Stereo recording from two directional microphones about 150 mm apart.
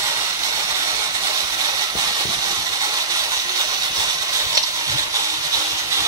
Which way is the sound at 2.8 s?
25° right (ahead or behind).